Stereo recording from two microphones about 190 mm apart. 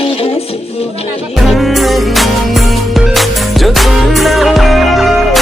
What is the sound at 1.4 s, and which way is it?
Music, centre (ahead or behind).